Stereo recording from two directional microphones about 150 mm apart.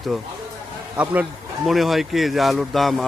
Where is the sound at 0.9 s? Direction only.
10° right (ahead or behind).